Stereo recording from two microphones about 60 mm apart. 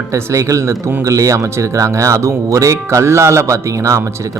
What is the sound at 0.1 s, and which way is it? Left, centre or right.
Speech, right.